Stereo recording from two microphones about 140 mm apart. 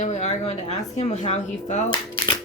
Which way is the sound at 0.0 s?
55° left (ahead or behind).